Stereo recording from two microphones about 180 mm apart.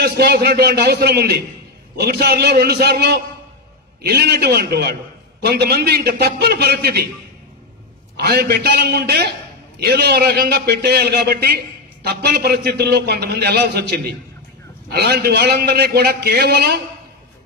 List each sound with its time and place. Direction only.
0.0 s a man's voice: 60° right (ahead or behind)
8.2 s a man's voice: 65° right (ahead or behind)